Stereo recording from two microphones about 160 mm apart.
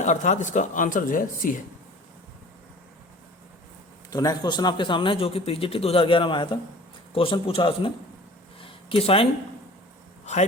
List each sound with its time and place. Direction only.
0.0 s speech: 50° left (ahead or behind)
4.1 s a man's voice: 20° left (ahead or behind)
8.6 s a sound: 35° left (ahead or behind)